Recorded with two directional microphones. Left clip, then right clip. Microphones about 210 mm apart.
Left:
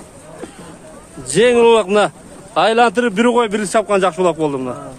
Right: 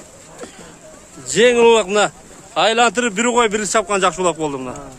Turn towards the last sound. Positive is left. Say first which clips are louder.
# left 3 dB
turn(degrees=0)  # may be behind; listen again after turning